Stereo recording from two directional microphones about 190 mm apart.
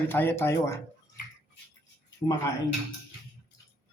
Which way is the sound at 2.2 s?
20° left (ahead or behind).